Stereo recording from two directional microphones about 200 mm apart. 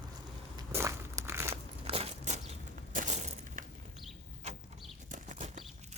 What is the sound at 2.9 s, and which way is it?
Crushing, 40° right (ahead or behind).